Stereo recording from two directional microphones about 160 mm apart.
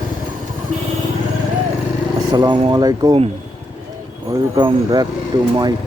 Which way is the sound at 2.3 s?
25° right (ahead or behind).